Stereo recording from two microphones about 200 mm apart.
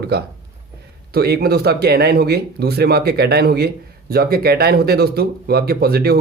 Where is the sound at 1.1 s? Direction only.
50° right (ahead or behind).